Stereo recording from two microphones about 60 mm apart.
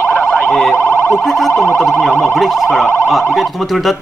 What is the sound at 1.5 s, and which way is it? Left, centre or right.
Speech, left.